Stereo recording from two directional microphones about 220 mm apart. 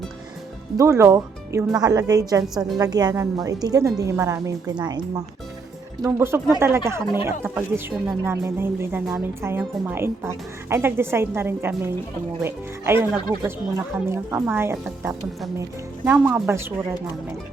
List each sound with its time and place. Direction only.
0.8 s speech: 15° right (ahead or behind)